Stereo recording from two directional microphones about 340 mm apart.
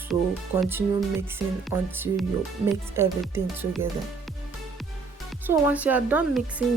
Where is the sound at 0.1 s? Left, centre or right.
Centre.